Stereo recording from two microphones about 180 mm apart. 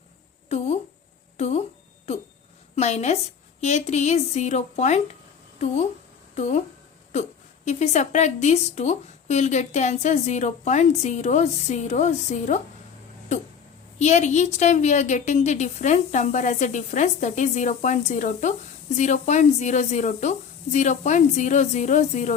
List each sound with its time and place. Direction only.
0.4 s a sound: 40° left (ahead or behind)
1.4 s speech: 40° left (ahead or behind)
2.7 s a woman's voice: 40° left (ahead or behind)
6.3 s a woman's voice: 40° left (ahead or behind)
14.0 s a woman's voice: 40° left (ahead or behind)